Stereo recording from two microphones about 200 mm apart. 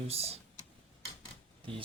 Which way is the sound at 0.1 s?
30° right (ahead or behind).